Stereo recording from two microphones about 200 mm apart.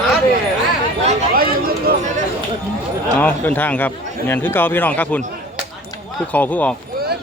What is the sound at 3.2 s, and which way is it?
Speech, 10° left (ahead or behind).